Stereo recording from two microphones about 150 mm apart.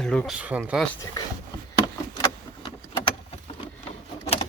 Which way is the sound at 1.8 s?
35° left (ahead or behind).